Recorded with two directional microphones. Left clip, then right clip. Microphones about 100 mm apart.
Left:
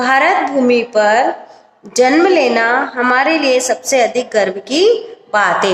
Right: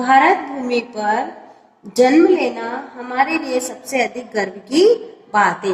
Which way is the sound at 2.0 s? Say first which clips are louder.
Left 2 dB; 45° left (ahead or behind).